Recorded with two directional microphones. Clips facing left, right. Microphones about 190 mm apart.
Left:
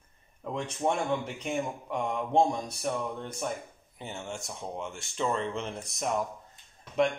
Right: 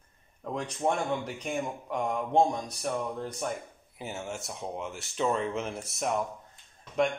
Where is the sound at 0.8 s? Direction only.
5° right (ahead or behind).